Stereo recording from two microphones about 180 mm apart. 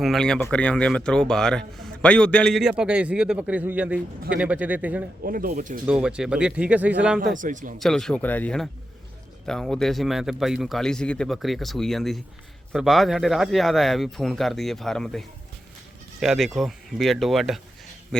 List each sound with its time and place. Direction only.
0.0 s a man's voice: centre (ahead or behind)
5.2 s speech: 50° right (ahead or behind)
5.8 s a man's voice: 5° right (ahead or behind)
7.3 s speech: 45° right (ahead or behind)
7.8 s a man's voice: centre (ahead or behind)
16.2 s a man's voice: centre (ahead or behind)